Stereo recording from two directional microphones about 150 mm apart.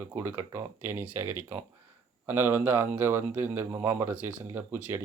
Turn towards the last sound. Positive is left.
turn(degrees=-15)  # may be behind; listen again after turning